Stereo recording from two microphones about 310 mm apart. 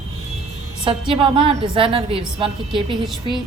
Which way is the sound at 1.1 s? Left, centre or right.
Centre.